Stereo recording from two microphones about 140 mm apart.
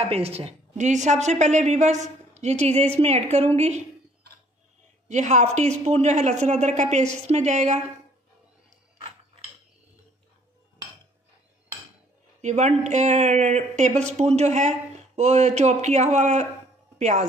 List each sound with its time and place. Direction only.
0.0 s a woman's voice: 45° right (ahead or behind)
5.0 s speech: 60° right (ahead or behind)
12.4 s speech: 55° right (ahead or behind)